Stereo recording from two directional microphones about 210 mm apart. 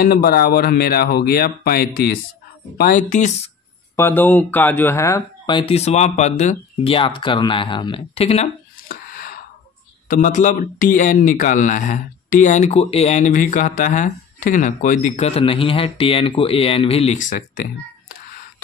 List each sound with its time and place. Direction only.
0.0 s a man's voice: 45° left (ahead or behind)
3.9 s speech: 10° left (ahead or behind); by 8.5 s 30° left (ahead or behind)
8.8 s a sound: 45° left (ahead or behind)
10.0 s a man's voice: 40° left (ahead or behind)